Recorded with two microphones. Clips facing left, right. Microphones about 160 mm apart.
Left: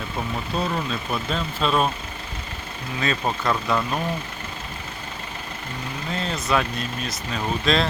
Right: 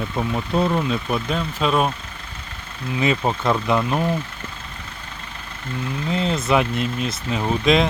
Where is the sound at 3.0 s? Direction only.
20° right (ahead or behind).